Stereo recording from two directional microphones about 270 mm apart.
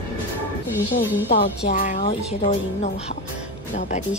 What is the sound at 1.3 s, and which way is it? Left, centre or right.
A woman's voice, left.